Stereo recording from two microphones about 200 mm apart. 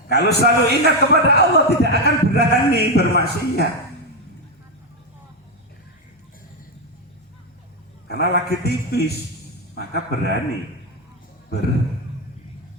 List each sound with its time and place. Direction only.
0.1 s a man's voice: 55° left (ahead or behind)
8.0 s a man's voice: 55° left (ahead or behind)